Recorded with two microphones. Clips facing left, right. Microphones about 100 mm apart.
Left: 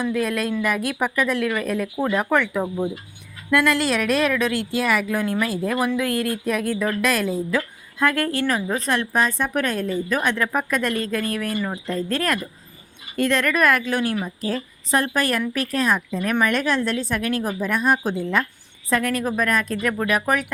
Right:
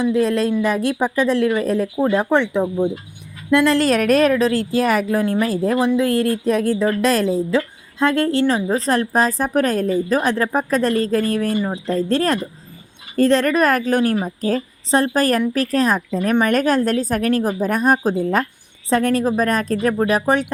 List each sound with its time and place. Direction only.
0.0 s speech: 25° right (ahead or behind)
3.8 s a woman's voice: 45° right (ahead or behind)
14.8 s a woman's voice: 30° right (ahead or behind)